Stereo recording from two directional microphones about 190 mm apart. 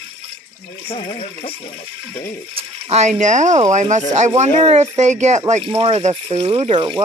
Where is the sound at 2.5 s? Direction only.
35° right (ahead or behind).